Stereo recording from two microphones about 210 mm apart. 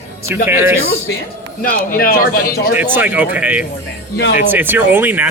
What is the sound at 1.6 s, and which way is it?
Speech, 45° left (ahead or behind).